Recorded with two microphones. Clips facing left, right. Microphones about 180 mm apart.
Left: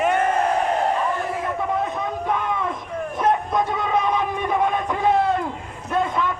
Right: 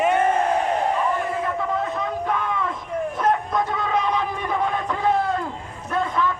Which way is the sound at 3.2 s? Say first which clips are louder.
Left 2 dB; 20° left (ahead or behind).